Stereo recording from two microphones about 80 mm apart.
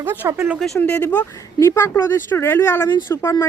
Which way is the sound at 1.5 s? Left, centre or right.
Left.